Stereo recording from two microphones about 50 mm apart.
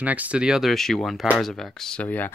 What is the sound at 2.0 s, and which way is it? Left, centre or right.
Speech, left.